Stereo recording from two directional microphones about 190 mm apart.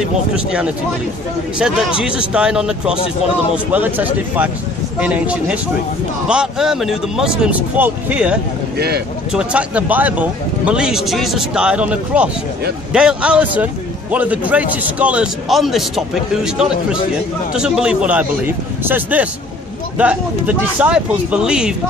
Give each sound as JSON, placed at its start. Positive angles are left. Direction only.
{"t": 0.3, "sound": "speech", "side_deg": -5}
{"t": 2.0, "sound": "speech", "side_deg": -5}
{"t": 8.7, "sound": "speech", "side_deg": -60}
{"t": 9.3, "sound": "speech", "side_deg": -5}